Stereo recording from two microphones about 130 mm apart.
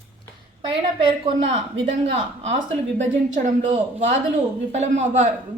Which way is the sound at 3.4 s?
65° right (ahead or behind).